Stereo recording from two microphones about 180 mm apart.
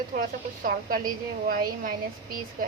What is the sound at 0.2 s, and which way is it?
Speech, 55° right (ahead or behind).